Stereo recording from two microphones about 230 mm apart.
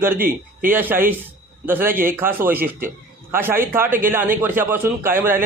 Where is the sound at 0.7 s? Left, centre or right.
Centre.